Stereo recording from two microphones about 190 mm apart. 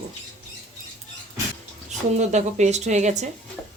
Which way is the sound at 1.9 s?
35° right (ahead or behind).